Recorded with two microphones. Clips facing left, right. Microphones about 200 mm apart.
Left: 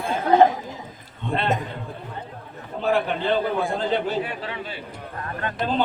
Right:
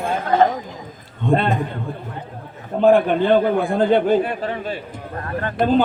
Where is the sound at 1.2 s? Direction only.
50° right (ahead or behind).